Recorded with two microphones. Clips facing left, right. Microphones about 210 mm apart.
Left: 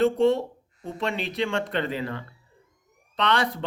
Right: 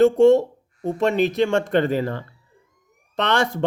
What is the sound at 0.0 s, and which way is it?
Speech, 45° right (ahead or behind).